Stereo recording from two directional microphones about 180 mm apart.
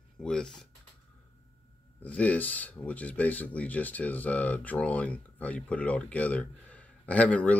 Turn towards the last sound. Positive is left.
turn(degrees=10)  # may be behind; listen again after turning